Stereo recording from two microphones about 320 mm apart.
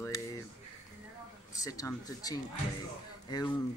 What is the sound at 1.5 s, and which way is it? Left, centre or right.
Speech, centre.